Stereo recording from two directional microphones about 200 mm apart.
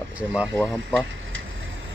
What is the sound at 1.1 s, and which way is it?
Vehicle, 70° right (ahead or behind).